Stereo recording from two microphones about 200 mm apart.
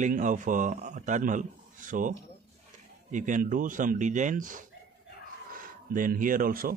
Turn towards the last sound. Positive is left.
turn(degrees=-45)  # may be behind; listen again after turning